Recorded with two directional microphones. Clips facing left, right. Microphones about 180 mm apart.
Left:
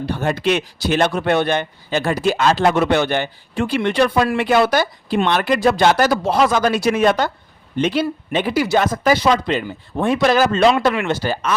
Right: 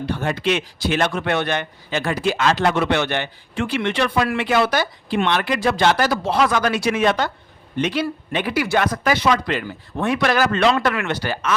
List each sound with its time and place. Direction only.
0.0 s a man's voice: 40° left (ahead or behind)
6.5 s speech: 30° left (ahead or behind)
6.7 s speech: 40° left (ahead or behind)
7.8 s speech: 30° left (ahead or behind)
9.0 s a man's voice: 35° left (ahead or behind)
9.5 s speech: 25° left (ahead or behind)